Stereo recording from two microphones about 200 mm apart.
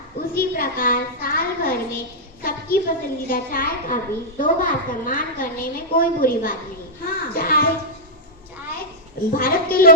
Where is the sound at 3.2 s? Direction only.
45° left (ahead or behind).